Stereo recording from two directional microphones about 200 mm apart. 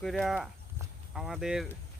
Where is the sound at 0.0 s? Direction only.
Centre (ahead or behind).